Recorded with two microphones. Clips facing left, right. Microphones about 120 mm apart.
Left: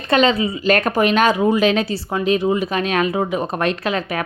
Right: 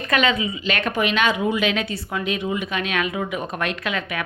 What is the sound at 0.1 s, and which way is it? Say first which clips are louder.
A woman's voice: left 5 dB; 30° left (ahead or behind).